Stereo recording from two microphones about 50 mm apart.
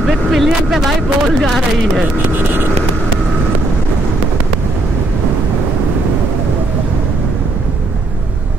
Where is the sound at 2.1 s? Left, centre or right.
Right.